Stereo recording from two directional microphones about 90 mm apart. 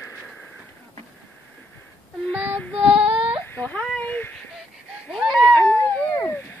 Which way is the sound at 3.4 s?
20° left (ahead or behind).